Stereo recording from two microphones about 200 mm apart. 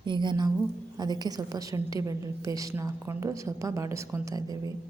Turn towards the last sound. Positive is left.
turn(degrees=-20)  # may be behind; listen again after turning